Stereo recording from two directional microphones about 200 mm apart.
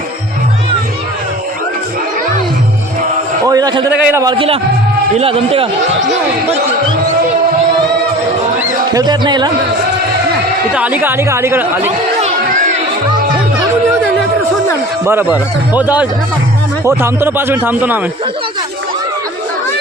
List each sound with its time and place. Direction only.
3.4 s a man's voice: 20° right (ahead or behind)
8.9 s speech: 20° right (ahead or behind)
10.8 s speech: 5° right (ahead or behind)
15.0 s speech: 10° right (ahead or behind)